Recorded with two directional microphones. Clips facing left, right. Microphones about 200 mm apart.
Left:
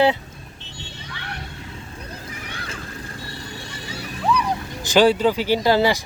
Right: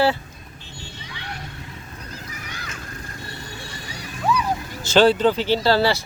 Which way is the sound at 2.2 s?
30° left (ahead or behind).